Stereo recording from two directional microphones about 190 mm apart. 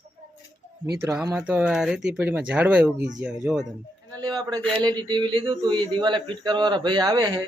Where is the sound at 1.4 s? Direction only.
10° right (ahead or behind).